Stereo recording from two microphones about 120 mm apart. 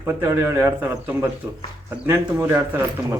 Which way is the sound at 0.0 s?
20° right (ahead or behind).